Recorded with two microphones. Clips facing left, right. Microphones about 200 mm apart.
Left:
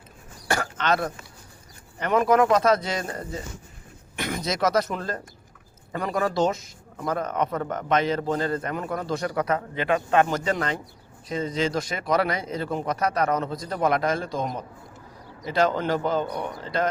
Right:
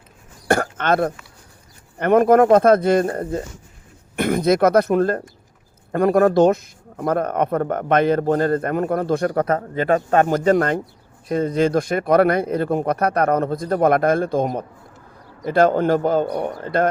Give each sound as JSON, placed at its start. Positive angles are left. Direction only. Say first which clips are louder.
{"t": 0.4, "sound": "throat clearing", "louder": "right 6 dB", "side_deg": -55}
{"t": 2.0, "sound": "speech", "louder": "right 7 dB", "side_deg": -55}